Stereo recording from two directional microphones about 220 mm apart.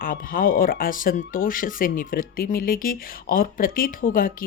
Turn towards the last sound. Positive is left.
turn(degrees=40)  # may be behind; listen again after turning